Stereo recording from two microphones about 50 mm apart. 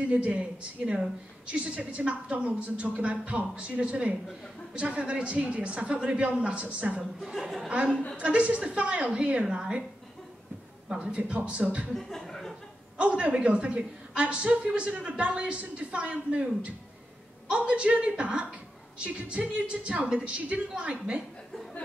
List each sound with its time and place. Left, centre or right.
0.0 s a man's voice: right
7.4 s speech: centre
7.7 s a man's voice: right
10.9 s a man's voice: right
12.1 s a sound: centre
12.9 s a man's voice: right